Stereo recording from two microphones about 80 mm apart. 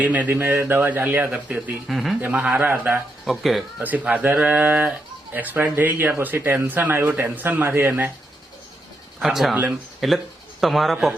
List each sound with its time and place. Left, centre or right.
0.0 s a man's voice: centre
1.9 s speech: centre
2.2 s a man's voice: right
3.2 s speech: centre
3.8 s a man's voice: centre
9.1 s speech: centre